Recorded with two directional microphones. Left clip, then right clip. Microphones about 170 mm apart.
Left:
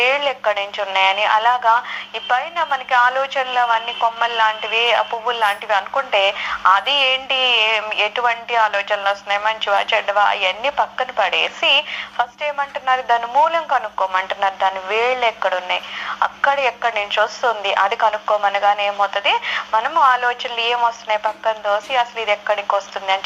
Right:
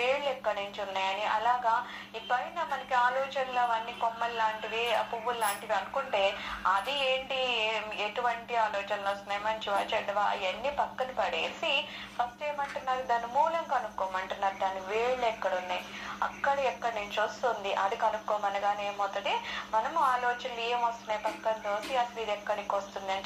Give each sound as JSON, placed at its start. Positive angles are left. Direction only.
{"t": 0.0, "sound": "speech", "side_deg": 30}